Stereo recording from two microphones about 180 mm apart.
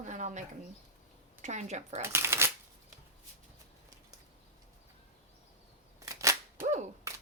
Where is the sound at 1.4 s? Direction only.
40° right (ahead or behind).